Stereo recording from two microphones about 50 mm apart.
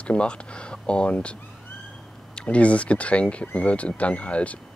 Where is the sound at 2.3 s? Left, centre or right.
Left.